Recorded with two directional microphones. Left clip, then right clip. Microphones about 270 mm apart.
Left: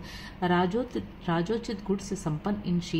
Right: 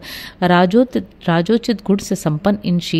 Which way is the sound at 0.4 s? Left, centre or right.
Right.